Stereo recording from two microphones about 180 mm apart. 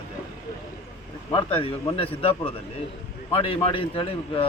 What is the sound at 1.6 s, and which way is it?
Speech, 30° left (ahead or behind).